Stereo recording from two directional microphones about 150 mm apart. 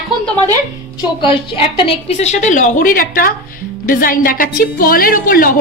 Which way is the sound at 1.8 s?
45° left (ahead or behind).